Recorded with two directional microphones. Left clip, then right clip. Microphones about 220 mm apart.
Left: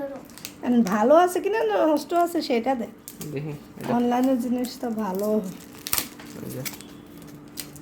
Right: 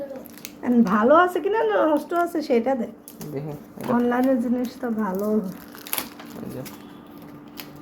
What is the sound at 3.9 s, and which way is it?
A woman's voice, 5° left (ahead or behind).